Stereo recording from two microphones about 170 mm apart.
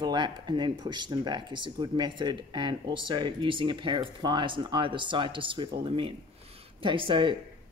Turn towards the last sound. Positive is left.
turn(degrees=-30)  # may be behind; listen again after turning